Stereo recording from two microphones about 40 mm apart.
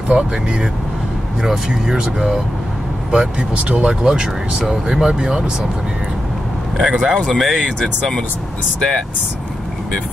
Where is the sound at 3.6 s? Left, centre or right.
Right.